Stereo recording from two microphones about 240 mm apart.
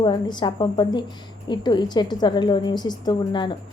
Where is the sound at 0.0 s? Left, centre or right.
Centre.